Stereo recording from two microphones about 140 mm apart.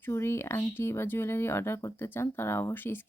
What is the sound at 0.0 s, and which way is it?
Speech, 15° left (ahead or behind).